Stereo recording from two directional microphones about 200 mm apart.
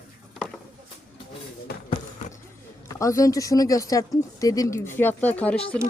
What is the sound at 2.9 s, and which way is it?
Speech, 15° left (ahead or behind).